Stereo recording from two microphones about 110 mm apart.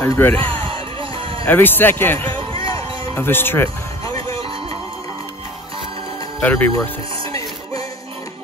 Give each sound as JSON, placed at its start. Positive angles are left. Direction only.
{"t": 0.0, "sound": "speech", "side_deg": 20}
{"t": 0.7, "sound": "music", "side_deg": -55}
{"t": 1.5, "sound": "a man's voice", "side_deg": 20}
{"t": 6.4, "sound": "speech", "side_deg": 15}